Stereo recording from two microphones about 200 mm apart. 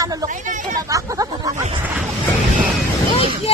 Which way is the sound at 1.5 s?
30° right (ahead or behind).